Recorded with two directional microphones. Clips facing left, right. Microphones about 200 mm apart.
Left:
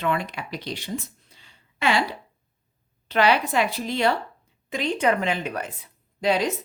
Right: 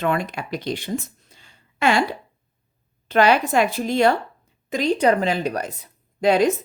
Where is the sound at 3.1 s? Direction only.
45° right (ahead or behind).